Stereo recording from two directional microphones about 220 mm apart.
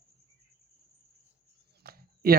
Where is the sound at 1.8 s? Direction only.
45° right (ahead or behind).